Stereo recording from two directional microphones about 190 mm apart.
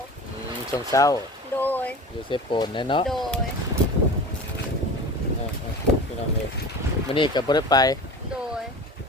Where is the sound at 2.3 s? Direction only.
25° left (ahead or behind).